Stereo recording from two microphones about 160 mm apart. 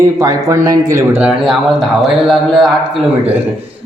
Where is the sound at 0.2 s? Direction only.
20° right (ahead or behind).